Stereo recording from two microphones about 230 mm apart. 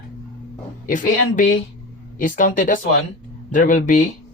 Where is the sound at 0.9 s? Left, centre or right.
Left.